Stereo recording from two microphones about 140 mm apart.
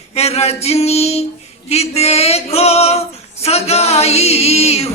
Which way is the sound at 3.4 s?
45° left (ahead or behind).